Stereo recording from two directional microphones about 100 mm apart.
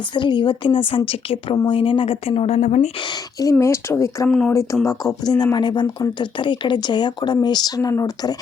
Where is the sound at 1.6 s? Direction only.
60° left (ahead or behind); by 3.0 s 90° left.